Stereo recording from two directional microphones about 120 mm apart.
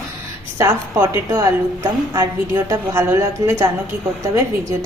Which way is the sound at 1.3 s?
30° right (ahead or behind).